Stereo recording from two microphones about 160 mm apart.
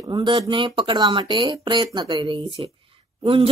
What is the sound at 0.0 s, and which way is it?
Speech, 30° right (ahead or behind).